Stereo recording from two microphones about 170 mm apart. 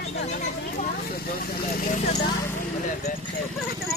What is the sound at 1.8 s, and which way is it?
Speech, 45° left (ahead or behind).